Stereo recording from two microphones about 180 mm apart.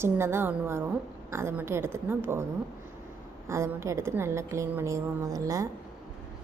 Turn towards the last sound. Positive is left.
turn(degrees=-20)  # may be behind; listen again after turning